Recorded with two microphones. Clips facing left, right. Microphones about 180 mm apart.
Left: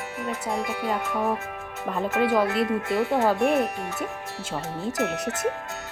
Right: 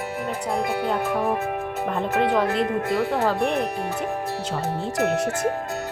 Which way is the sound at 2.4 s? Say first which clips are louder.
Right 2 dB; 35° right (ahead or behind).